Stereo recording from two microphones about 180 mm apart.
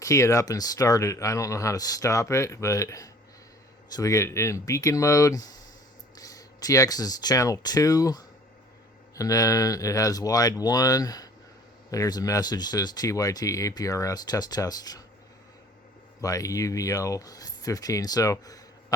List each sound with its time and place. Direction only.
0.0 s speech: 15° left (ahead or behind)
16.2 s speech: 20° left (ahead or behind)